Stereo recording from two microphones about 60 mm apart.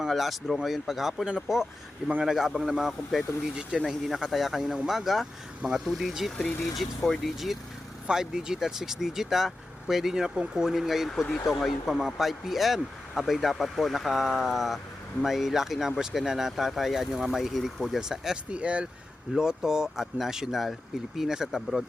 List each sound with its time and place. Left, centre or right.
0.0 s speech: centre
18.5 s speech: centre